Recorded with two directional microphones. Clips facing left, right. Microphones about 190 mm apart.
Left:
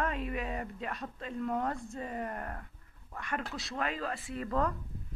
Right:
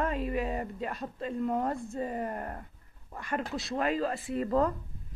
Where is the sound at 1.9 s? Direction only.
35° right (ahead or behind).